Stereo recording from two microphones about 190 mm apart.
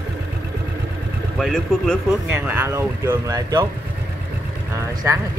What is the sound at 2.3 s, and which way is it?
Speech, 10° right (ahead or behind).